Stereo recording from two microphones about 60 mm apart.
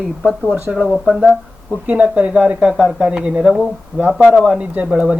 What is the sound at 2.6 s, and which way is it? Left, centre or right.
Speech, centre.